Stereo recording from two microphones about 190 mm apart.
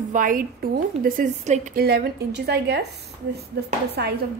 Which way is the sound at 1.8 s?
55° right (ahead or behind).